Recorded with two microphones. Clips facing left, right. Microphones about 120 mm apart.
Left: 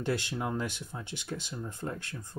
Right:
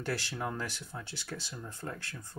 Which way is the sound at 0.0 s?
20° left (ahead or behind).